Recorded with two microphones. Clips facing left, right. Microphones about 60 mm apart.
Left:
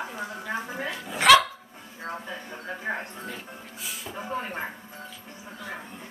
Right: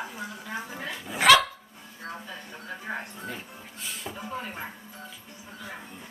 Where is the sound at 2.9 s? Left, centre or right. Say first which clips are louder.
Left 3 dB; left.